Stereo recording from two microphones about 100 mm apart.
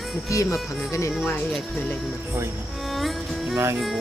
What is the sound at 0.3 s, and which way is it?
Speech, 30° left (ahead or behind).